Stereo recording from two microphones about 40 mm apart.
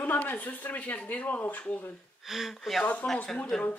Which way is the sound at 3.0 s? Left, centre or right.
Left.